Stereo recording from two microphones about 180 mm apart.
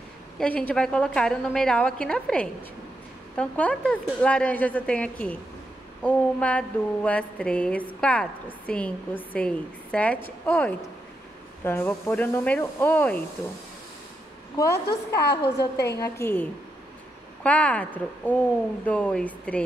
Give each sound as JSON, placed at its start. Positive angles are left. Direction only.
{"t": 0.4, "sound": "a woman's voice", "side_deg": 5}
{"t": 14.7, "sound": "a woman's voice", "side_deg": 65}
{"t": 16.0, "sound": "a woman's voice", "side_deg": 15}